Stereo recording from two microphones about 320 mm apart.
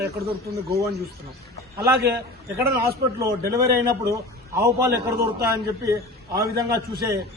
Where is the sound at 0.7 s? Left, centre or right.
Centre.